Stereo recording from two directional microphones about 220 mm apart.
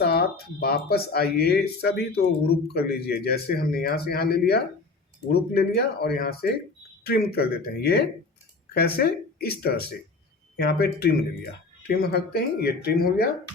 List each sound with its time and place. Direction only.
0.0 s speech: 45° left (ahead or behind)